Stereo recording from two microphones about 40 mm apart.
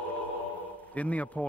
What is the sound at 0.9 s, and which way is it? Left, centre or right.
Speech, left.